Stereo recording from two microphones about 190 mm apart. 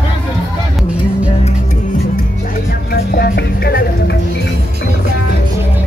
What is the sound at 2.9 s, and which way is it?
Music, 55° left (ahead or behind).